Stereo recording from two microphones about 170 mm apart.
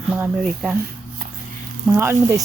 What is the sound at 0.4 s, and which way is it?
Speech, centre (ahead or behind).